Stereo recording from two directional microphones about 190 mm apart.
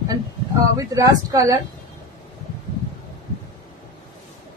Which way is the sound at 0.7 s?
20° right (ahead or behind).